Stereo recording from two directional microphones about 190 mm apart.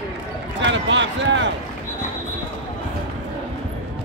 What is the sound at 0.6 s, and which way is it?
Speech, 75° right (ahead or behind).